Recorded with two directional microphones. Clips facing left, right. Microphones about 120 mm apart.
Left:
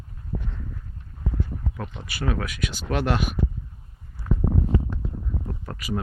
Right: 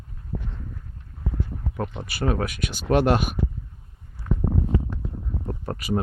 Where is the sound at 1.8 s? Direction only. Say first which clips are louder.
Right 5 dB; 40° right (ahead or behind).